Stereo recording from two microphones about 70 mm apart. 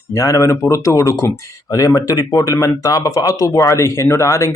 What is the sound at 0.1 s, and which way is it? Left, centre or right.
Speech, left.